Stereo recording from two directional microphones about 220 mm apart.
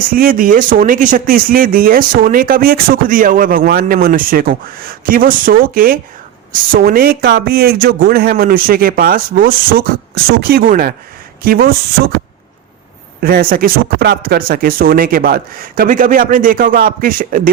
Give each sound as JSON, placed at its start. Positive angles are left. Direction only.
{"t": 0.1, "sound": "speech", "side_deg": -40}
{"t": 13.2, "sound": "speech", "side_deg": -45}